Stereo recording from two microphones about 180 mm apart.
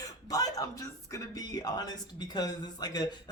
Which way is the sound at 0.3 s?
20° left (ahead or behind).